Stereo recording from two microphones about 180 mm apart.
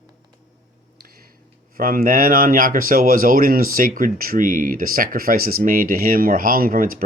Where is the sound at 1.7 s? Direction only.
55° right (ahead or behind).